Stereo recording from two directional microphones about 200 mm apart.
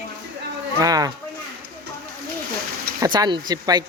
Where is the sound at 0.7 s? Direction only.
20° right (ahead or behind).